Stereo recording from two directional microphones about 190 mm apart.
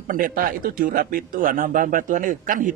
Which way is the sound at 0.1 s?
45° right (ahead or behind).